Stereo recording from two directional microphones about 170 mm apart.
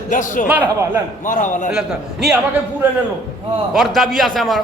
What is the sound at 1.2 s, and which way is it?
Speech, 50° left (ahead or behind).